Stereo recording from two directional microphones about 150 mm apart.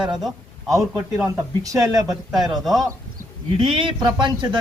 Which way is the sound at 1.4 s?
20° right (ahead or behind).